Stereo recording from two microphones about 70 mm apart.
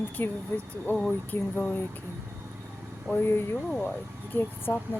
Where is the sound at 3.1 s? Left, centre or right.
Left.